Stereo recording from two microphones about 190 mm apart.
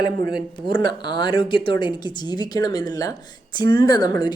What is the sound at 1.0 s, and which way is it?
Speech, 25° left (ahead or behind).